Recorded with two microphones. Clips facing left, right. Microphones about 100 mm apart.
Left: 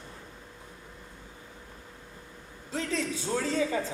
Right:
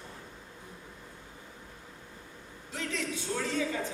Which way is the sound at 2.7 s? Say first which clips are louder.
Left 4 dB; 35° left (ahead or behind).